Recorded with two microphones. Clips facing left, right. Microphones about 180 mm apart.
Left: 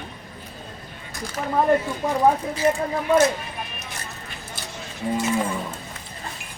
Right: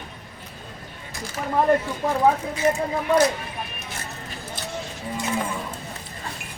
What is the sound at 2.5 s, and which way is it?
Speech, 30° left (ahead or behind).